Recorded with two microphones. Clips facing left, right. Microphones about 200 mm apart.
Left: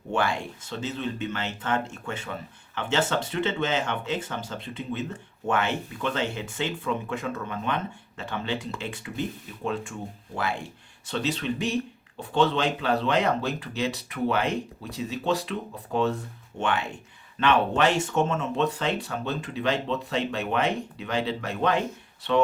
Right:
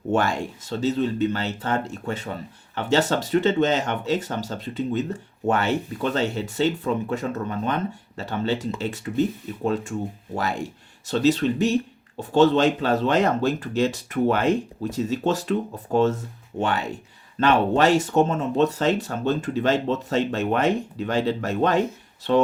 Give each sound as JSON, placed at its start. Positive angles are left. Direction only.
{"t": 0.1, "sound": "speech", "side_deg": -45}